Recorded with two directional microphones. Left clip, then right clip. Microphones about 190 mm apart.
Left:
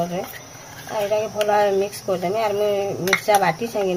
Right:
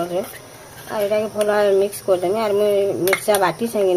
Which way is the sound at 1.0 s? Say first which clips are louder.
Right 1 dB; 25° right (ahead or behind).